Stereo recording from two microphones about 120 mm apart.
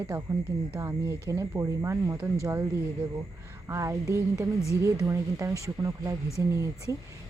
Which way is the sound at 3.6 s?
25° right (ahead or behind).